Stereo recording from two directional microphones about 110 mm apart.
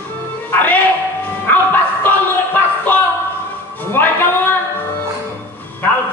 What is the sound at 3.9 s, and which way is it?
Speech, 20° left (ahead or behind).